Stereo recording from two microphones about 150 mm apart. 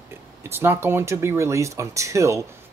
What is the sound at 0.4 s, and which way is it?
Speech, 15° right (ahead or behind).